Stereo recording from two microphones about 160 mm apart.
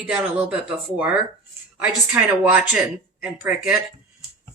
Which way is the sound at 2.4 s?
5° right (ahead or behind).